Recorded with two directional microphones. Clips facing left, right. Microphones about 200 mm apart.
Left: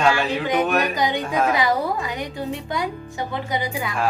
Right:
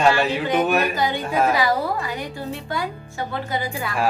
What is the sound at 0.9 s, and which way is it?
A woman's voice, 15° left (ahead or behind).